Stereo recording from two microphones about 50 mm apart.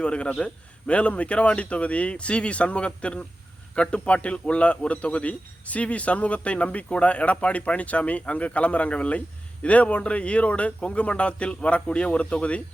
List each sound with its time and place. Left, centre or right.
0.0 s a man's voice: left